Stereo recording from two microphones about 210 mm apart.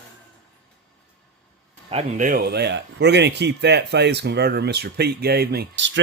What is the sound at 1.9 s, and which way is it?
A man's voice, 30° right (ahead or behind).